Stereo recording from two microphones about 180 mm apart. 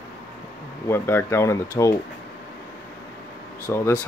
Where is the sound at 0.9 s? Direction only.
15° left (ahead or behind).